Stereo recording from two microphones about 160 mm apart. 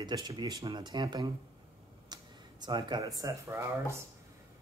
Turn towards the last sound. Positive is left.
turn(degrees=-15)  # may be behind; listen again after turning